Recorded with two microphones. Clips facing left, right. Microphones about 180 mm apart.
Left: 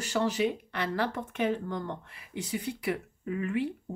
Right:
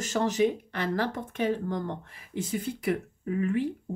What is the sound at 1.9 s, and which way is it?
A woman's voice, 50° right (ahead or behind).